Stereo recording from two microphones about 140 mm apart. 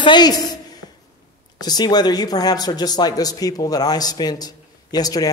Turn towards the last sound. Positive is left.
turn(degrees=25)  # may be behind; listen again after turning